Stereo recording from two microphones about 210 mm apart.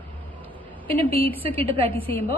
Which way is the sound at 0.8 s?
25° right (ahead or behind).